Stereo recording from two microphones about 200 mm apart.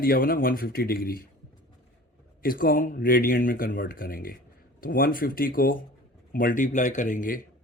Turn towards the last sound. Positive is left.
turn(degrees=40)  # may be behind; listen again after turning